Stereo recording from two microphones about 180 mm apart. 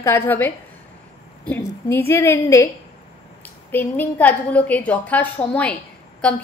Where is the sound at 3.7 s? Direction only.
10° left (ahead or behind).